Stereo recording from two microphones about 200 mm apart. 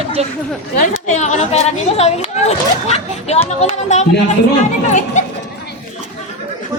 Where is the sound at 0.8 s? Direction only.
35° left (ahead or behind).